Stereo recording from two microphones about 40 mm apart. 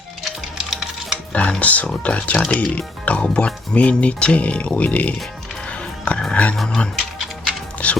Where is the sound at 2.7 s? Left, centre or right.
Left.